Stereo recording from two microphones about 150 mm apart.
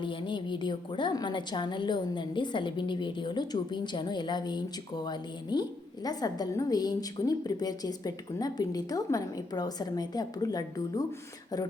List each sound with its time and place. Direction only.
0.0 s a woman's voice: 35° left (ahead or behind)